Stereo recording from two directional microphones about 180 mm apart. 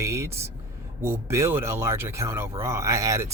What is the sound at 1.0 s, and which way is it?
A man's voice, 15° right (ahead or behind).